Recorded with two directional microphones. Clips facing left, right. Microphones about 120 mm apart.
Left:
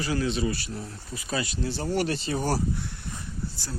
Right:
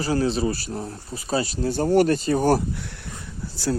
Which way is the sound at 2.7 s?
90° right.